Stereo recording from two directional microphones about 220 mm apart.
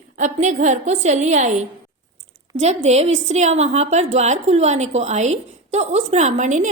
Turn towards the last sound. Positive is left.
turn(degrees=-35)  # may be behind; listen again after turning